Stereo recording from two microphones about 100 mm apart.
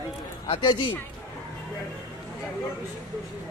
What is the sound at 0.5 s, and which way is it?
Speech, 55° left (ahead or behind).